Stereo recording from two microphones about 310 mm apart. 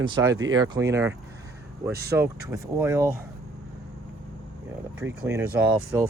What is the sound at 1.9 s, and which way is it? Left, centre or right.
Speech, right.